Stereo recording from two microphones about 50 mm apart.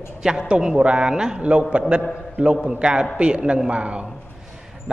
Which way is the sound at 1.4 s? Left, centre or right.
Right.